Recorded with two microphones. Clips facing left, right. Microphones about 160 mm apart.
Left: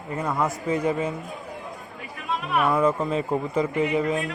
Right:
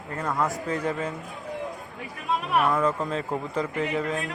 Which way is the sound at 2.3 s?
20° right (ahead or behind).